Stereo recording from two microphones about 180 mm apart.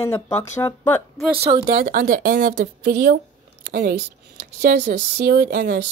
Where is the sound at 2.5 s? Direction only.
75° right (ahead or behind).